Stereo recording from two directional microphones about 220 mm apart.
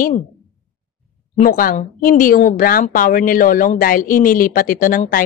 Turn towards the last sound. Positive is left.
turn(degrees=40)  # may be behind; listen again after turning